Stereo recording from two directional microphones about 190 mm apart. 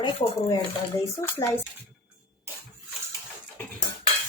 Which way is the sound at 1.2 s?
15° left (ahead or behind).